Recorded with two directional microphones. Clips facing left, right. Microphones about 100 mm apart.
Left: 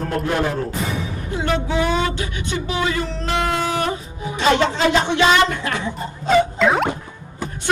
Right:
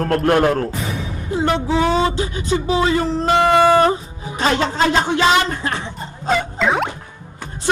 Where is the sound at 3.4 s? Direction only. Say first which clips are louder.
Right 13 dB; 55° right (ahead or behind).